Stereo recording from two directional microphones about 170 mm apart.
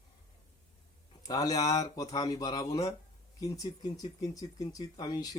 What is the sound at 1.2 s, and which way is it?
Speech, 20° left (ahead or behind).